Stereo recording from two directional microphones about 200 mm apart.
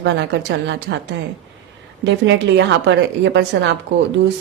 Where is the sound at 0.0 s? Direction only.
60° right (ahead or behind).